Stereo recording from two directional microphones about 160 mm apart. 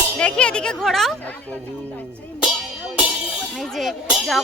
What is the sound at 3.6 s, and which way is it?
Speech, centre (ahead or behind).